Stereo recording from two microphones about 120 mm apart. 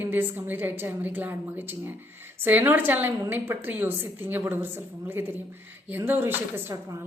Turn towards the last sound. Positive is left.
turn(degrees=-20)  # may be behind; listen again after turning